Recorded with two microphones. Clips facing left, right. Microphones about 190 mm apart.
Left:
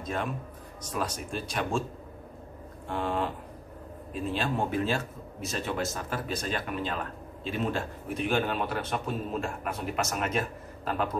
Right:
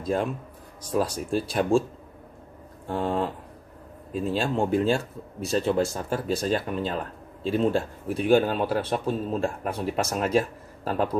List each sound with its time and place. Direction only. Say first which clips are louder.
0.0 s a man's voice: right 6 dB; 30° right (ahead or behind)
2.9 s a man's voice: right 4 dB; 30° right (ahead or behind)